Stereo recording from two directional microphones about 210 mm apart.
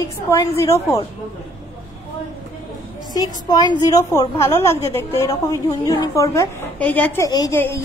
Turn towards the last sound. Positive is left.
turn(degrees=10)  # may be behind; listen again after turning